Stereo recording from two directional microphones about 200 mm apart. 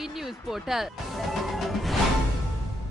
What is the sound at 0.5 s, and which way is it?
Speech, centre (ahead or behind).